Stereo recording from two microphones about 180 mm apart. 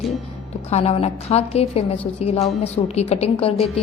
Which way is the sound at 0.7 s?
35° left (ahead or behind).